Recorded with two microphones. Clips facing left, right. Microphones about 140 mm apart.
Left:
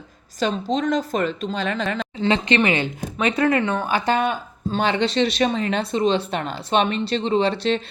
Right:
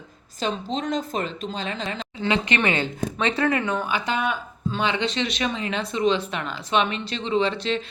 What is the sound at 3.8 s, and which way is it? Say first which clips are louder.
Speech: left 5 dB; 40° left (ahead or behind).